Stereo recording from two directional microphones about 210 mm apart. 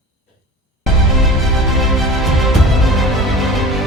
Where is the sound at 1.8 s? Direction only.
Centre (ahead or behind).